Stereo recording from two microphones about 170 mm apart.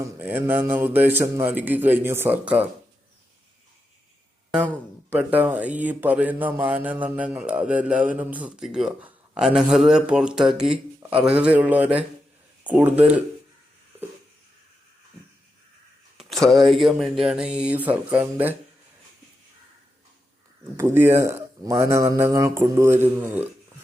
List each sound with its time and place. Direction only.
0.0 s speech: 10° right (ahead or behind)
5.1 s speech: 10° right (ahead or behind)
16.1 s speech: centre (ahead or behind)
20.7 s speech: 15° right (ahead or behind)